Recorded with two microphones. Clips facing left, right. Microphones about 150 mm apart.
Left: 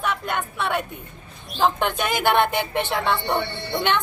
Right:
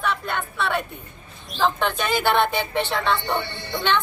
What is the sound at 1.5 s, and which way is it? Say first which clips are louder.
A woman's voice: left 1 dB; 15° left (ahead or behind).